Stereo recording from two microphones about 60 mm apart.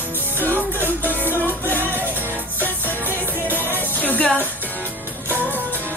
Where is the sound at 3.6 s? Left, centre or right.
Right.